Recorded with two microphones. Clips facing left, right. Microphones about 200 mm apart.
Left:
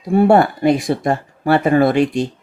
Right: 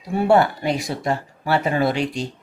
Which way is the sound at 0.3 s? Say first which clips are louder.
Left 2 dB; 55° left (ahead or behind).